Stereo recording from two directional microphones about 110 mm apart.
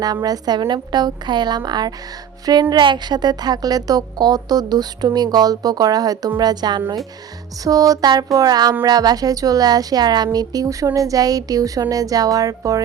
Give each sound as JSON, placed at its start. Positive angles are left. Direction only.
{"t": 0.0, "sound": "a woman's voice", "side_deg": -35}